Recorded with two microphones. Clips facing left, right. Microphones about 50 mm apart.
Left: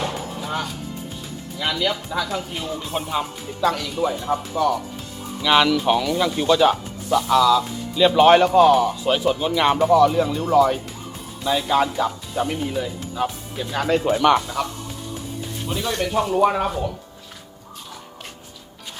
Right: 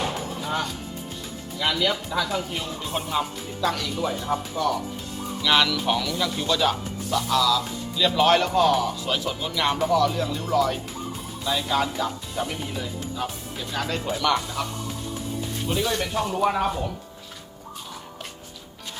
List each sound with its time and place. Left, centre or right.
0.0 s music: centre
1.5 s speech: centre
5.4 s speech: centre
9.7 s speech: centre
10.0 s speech: left
13.8 s speech: left
14.1 s speech: left
14.6 s speech: centre